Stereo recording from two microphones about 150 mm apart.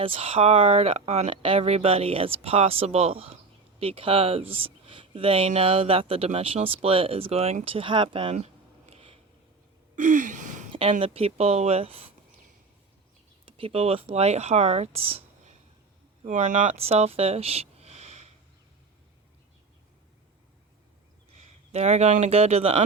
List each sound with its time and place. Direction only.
0.0 s speech: 40° right (ahead or behind)
8.9 s a sound: 40° right (ahead or behind)
9.9 s gasp: 55° right (ahead or behind)
10.7 s a sound: 40° right (ahead or behind)
11.0 s speech: 40° right (ahead or behind)
13.4 s speech: 35° right (ahead or behind)
16.2 s speech: 55° right (ahead or behind)
21.7 s speech: 45° right (ahead or behind)